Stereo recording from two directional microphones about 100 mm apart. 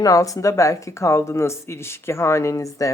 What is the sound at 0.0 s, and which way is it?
Speech, 35° left (ahead or behind).